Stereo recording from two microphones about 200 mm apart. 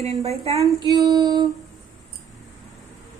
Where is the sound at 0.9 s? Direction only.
20° right (ahead or behind).